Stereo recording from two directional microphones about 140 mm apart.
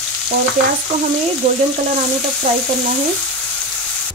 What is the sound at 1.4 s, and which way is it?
Speech, 50° right (ahead or behind).